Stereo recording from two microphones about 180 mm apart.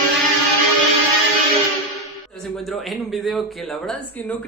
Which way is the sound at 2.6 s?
Centre (ahead or behind).